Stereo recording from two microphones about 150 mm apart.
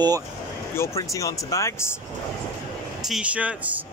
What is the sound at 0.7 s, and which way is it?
Speech, 20° left (ahead or behind).